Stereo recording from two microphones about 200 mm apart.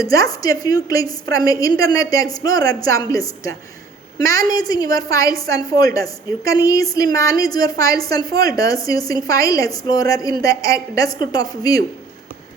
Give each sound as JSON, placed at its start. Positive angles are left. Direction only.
{"t": 0.0, "sound": "a woman's voice", "side_deg": 15}